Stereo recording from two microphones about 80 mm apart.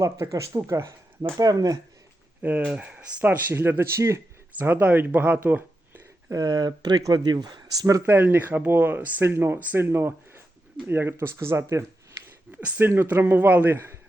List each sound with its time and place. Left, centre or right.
0.0 s speech: right
2.4 s speech: centre
3.5 s speech: right
4.5 s speech: right
6.3 s speech: right
7.8 s speech: right
8.0 s speech: right
12.5 s speech: centre
12.8 s speech: right